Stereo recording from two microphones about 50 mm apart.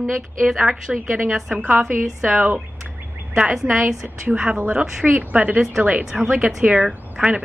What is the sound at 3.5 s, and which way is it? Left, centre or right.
Speech, centre.